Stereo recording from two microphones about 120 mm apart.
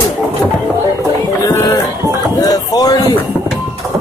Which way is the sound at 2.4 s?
30° left (ahead or behind).